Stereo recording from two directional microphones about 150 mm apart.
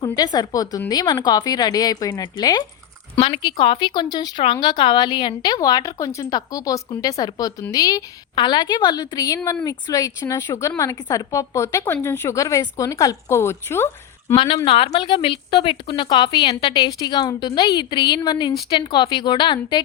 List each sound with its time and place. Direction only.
0.0 s a woman's voice: 25° left (ahead or behind)
3.2 s a woman's voice: 35° left (ahead or behind); by 14.3 s 15° left (ahead or behind)
14.3 s speech: 35° left (ahead or behind)